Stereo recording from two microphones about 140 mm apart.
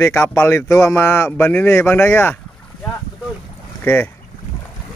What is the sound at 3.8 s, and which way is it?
Speech, 15° left (ahead or behind).